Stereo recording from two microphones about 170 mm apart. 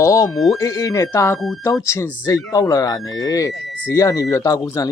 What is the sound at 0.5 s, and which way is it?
Speech, 20° left (ahead or behind).